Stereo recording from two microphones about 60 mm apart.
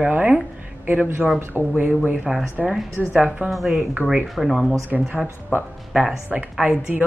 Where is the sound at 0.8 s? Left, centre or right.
Right.